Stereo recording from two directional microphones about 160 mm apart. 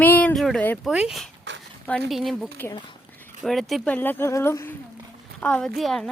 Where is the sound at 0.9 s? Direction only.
5° right (ahead or behind).